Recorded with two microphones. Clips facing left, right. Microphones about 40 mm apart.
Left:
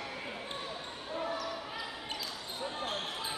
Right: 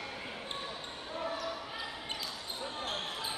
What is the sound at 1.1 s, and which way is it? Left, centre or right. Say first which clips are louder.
Basketball bounce: left 1 dB; centre.